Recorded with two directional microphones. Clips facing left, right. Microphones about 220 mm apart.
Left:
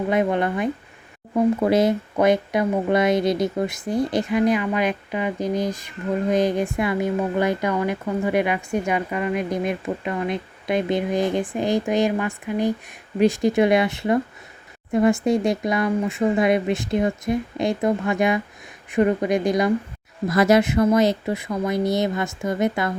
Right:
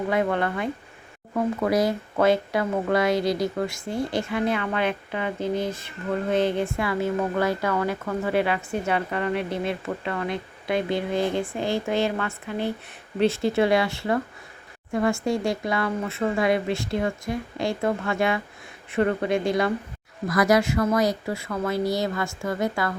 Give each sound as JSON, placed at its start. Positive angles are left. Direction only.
{"t": 0.1, "sound": "speech", "side_deg": 20}